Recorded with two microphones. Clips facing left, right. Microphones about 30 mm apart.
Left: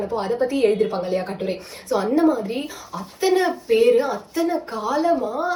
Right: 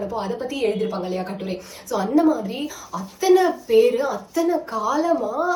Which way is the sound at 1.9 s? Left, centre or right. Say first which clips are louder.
Even; left.